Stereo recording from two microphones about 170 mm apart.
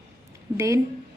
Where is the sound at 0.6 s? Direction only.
15° right (ahead or behind).